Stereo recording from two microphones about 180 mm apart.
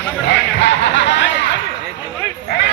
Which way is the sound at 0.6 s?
80° left.